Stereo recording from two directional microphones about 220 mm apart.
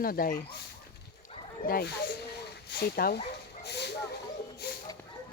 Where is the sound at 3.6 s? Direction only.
50° left (ahead or behind).